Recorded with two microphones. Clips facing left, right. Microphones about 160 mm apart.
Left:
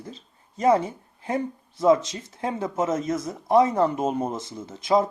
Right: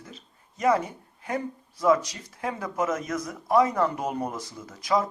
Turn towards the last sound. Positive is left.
turn(degrees=25)  # may be behind; listen again after turning